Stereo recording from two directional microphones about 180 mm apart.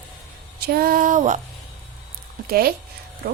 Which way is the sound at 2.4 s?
55° right (ahead or behind).